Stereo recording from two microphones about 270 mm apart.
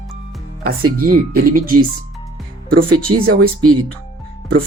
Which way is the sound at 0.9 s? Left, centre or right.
Right.